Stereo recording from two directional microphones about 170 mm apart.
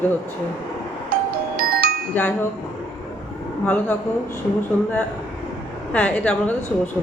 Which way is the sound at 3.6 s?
10° left (ahead or behind).